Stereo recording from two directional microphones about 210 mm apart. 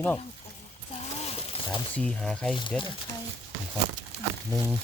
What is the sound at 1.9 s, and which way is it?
Speech, 5° left (ahead or behind).